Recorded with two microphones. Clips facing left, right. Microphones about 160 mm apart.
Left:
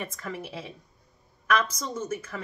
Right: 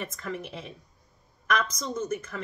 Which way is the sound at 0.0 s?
5° left (ahead or behind).